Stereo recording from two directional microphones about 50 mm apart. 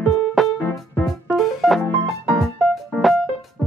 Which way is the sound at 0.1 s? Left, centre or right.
Centre.